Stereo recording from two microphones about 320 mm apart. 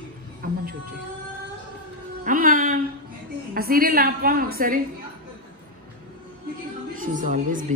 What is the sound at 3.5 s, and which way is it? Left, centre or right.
A woman's voice, right.